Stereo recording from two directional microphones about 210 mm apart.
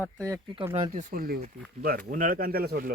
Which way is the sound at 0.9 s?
35° right (ahead or behind).